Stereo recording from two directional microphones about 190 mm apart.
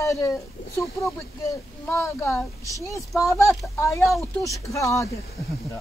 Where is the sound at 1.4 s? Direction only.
15° left (ahead or behind).